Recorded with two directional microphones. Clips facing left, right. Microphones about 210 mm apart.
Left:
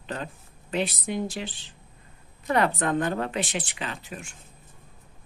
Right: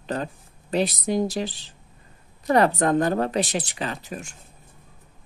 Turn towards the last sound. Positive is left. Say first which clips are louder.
# right 5 dB
turn(degrees=-40)  # may be behind; listen again after turning